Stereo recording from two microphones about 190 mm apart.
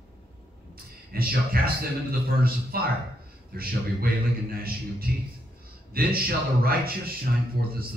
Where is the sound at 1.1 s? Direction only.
50° right (ahead or behind).